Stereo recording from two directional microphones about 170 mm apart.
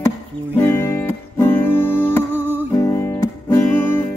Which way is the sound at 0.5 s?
15° left (ahead or behind).